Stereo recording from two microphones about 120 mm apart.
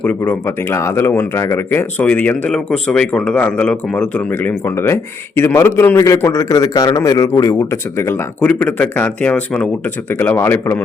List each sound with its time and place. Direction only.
0.0 s a man's voice: 15° left (ahead or behind)